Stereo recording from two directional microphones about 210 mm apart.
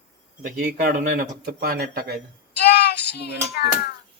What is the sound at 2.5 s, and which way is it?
Child singing, 50° left (ahead or behind).